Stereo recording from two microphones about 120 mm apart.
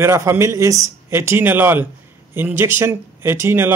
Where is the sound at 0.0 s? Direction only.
20° right (ahead or behind).